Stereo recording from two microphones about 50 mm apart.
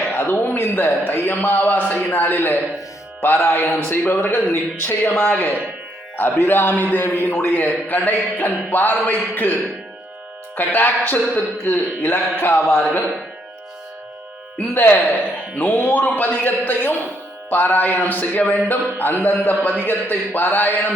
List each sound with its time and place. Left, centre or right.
0.1 s a man's voice: left
3.2 s music: left
3.8 s a man's voice: left
5.2 s a man's voice: left
14.7 s a man's voice: left